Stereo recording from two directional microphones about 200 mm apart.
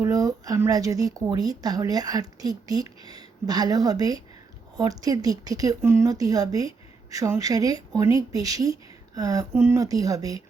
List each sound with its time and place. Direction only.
0.0 s speech: 15° right (ahead or behind)